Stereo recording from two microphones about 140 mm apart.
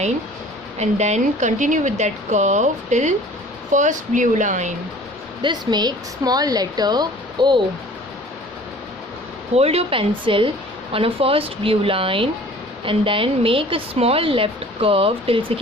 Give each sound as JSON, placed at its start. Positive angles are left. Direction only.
{"t": 0.8, "sound": "speech", "side_deg": -55}
{"t": 5.4, "sound": "a woman's voice", "side_deg": -30}
{"t": 9.6, "sound": "a woman's voice", "side_deg": -45}